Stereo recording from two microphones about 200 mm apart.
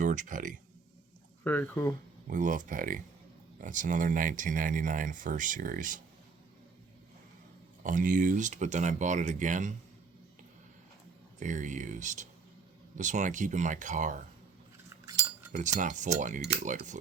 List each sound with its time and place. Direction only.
0.0 s speech: 40° right (ahead or behind)
1.5 s speech: 10° left (ahead or behind)
2.3 s speech: 40° right (ahead or behind)
7.9 s speech: 40° right (ahead or behind)
11.3 s speech: 40° right (ahead or behind)
14.8 s cutlery: 15° right (ahead or behind)
15.8 s speech: 40° right (ahead or behind)